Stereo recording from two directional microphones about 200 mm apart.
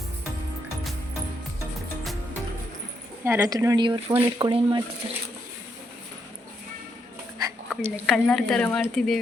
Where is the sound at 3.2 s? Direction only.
15° right (ahead or behind).